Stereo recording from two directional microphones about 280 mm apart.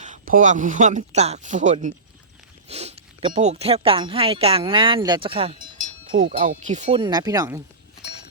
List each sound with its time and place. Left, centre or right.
0.0 s speech: right; by 7.6 s centre